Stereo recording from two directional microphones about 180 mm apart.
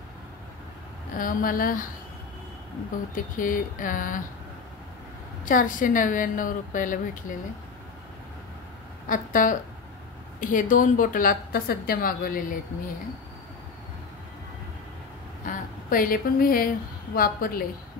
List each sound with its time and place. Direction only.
1.1 s a woman's voice: 50° left (ahead or behind)
3.3 s a woman's voice: 50° left (ahead or behind)
5.4 s a woman's voice: 50° left (ahead or behind)
9.1 s a woman's voice: 50° left (ahead or behind)
15.4 s a woman's voice: 50° left (ahead or behind)